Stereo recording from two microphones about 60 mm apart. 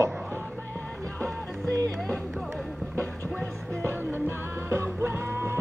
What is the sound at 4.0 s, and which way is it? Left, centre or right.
Music, right.